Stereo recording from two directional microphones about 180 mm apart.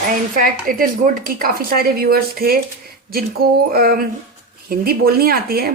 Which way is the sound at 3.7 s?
55° right (ahead or behind).